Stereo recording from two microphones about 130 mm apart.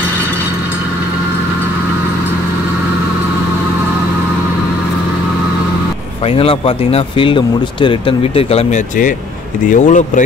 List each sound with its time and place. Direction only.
6.2 s speech: 45° left (ahead or behind)
9.7 s a man's voice: 70° left (ahead or behind)